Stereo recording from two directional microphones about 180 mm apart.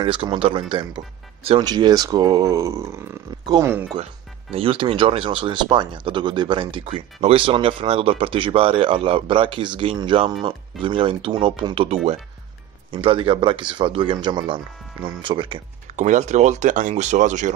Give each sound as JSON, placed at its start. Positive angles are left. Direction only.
{"t": 0.0, "sound": "speech", "side_deg": -30}
{"t": 3.9, "sound": "speech", "side_deg": -30}
{"t": 16.0, "sound": "speech", "side_deg": -40}